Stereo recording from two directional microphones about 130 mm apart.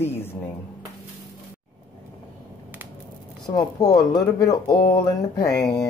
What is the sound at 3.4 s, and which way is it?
Speech, 30° left (ahead or behind).